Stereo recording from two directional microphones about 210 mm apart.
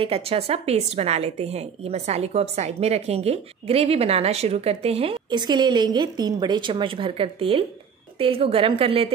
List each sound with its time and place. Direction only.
0.0 s a woman's voice: 25° right (ahead or behind)